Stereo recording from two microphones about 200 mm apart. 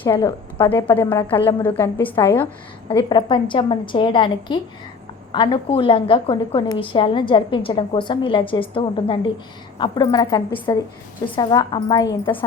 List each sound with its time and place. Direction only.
0.0 s a woman's voice: 20° left (ahead or behind)
1.5 s a woman's voice: 10° left (ahead or behind)
2.9 s a woman's voice: 20° left (ahead or behind)